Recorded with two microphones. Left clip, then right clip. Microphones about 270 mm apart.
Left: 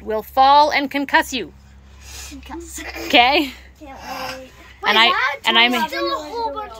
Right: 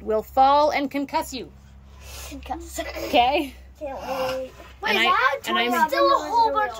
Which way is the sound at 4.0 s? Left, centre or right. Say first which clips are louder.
Right 2 dB; right.